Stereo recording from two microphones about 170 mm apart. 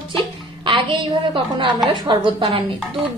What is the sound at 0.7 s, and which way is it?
A woman's voice, 30° right (ahead or behind).